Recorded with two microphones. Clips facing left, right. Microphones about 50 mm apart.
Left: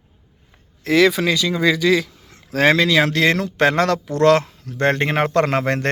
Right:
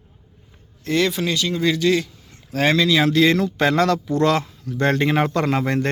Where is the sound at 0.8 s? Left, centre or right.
Left.